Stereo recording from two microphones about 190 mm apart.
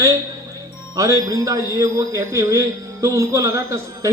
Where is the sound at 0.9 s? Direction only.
15° right (ahead or behind).